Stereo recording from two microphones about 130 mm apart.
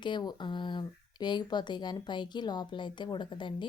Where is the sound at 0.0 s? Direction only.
35° left (ahead or behind).